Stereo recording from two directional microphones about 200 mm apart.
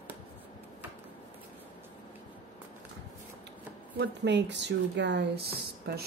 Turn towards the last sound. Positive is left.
turn(degrees=-50)  # may be behind; listen again after turning